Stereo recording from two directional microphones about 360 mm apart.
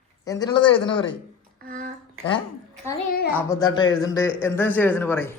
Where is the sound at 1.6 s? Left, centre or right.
Right.